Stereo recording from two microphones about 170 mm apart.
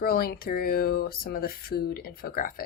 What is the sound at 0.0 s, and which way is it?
A woman's voice, 60° left (ahead or behind).